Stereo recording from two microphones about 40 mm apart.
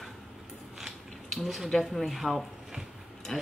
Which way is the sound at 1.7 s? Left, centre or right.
Centre.